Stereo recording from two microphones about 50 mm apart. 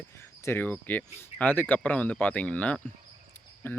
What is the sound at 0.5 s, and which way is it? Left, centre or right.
Speech, left.